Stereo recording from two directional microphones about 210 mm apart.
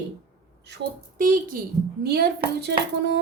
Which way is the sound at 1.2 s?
40° right (ahead or behind).